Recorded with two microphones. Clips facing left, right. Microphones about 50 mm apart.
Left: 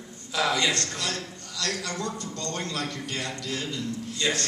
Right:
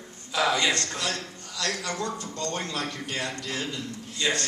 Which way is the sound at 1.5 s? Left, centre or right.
Right.